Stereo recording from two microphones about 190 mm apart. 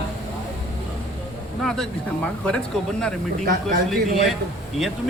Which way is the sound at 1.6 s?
5° left (ahead or behind).